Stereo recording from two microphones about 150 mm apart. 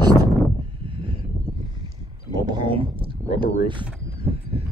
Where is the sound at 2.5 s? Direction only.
35° right (ahead or behind).